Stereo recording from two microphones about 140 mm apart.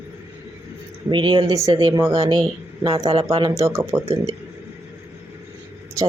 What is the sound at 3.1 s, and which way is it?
Speech, 45° right (ahead or behind).